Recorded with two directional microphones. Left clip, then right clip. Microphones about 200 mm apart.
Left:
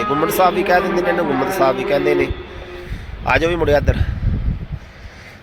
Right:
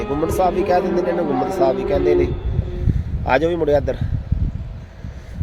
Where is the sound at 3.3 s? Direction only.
15° right (ahead or behind).